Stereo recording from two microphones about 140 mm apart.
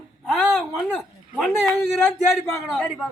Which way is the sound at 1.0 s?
Centre (ahead or behind).